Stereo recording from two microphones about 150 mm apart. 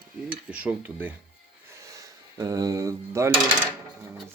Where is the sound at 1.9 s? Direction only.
25° right (ahead or behind).